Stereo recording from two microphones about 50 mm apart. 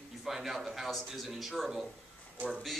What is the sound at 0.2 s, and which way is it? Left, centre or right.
A man's voice, centre.